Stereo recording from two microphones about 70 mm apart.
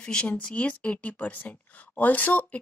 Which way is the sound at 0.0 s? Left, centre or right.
Centre.